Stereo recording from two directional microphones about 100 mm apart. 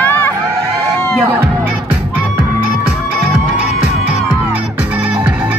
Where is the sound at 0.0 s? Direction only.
20° left (ahead or behind).